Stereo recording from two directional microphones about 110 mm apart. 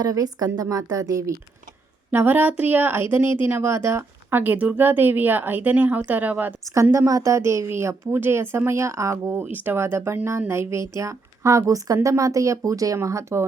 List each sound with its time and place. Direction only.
0.0 s a woman's voice: 35° right (ahead or behind)
2.0 s a woman's voice: 20° right (ahead or behind)
6.9 s a woman's voice: 30° right (ahead or behind)